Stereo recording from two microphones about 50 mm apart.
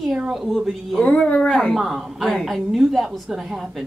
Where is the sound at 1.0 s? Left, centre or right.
Left.